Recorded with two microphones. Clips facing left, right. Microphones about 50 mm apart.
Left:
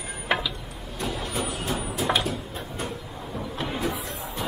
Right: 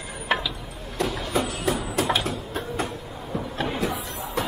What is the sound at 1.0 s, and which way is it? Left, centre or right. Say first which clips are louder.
Vehicle: right 4 dB; right.